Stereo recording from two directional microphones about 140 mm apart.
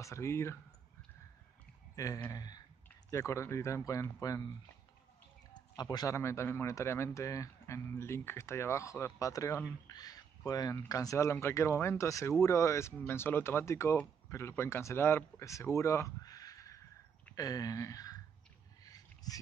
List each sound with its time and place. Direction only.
0.0 s speech: 20° left (ahead or behind)
2.0 s speech: 25° left (ahead or behind)
17.4 s a sound: 25° left (ahead or behind)